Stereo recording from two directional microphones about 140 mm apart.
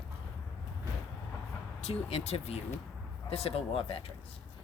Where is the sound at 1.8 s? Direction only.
50° left (ahead or behind).